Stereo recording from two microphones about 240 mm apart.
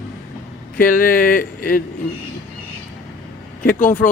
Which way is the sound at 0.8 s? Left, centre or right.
Left.